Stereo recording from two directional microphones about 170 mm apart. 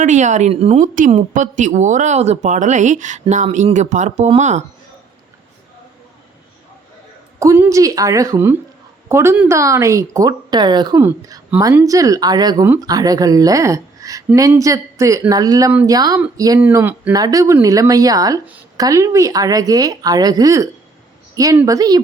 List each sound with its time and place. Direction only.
0.0 s speech: 45° right (ahead or behind)
0.9 s speech: 50° right (ahead or behind)
7.3 s speech: 15° right (ahead or behind)
12.6 s speech: 10° right (ahead or behind)
12.9 s speech: 20° right (ahead or behind)